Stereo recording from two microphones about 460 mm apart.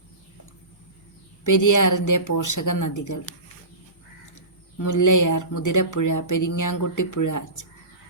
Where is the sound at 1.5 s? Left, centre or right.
Left.